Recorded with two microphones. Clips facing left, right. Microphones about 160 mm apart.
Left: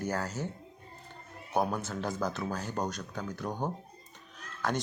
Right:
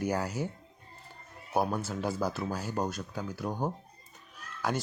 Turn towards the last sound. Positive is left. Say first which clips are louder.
# even
turn(degrees=-5)  # may be behind; listen again after turning